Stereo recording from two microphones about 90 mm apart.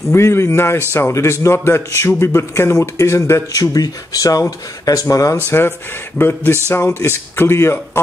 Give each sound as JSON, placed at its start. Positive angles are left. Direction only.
{"t": 0.1, "sound": "a man's voice", "side_deg": 30}
{"t": 3.5, "sound": "speech", "side_deg": 45}
{"t": 5.5, "sound": "a man's voice", "side_deg": 25}